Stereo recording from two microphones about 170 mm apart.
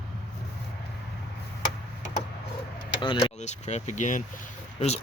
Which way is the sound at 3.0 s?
30° left (ahead or behind).